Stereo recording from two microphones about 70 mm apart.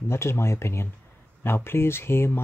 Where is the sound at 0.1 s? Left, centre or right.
Left.